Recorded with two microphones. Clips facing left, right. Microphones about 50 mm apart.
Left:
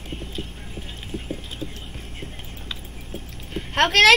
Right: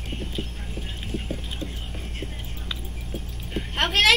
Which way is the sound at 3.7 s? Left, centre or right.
Left.